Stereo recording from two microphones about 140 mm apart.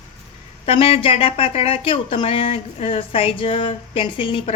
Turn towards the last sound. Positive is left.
turn(degrees=40)  # may be behind; listen again after turning